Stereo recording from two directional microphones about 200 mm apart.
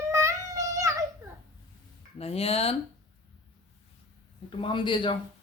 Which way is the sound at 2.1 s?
30° left (ahead or behind).